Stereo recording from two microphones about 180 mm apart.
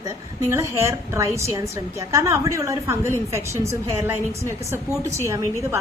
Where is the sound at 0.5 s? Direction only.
15° right (ahead or behind).